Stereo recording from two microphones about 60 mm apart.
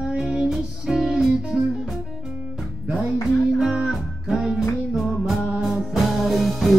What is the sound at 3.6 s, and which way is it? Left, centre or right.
Music, centre.